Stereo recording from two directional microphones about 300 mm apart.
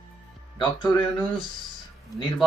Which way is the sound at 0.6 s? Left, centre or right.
Centre.